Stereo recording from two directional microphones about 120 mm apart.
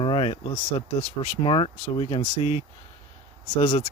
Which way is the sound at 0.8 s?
45° left (ahead or behind).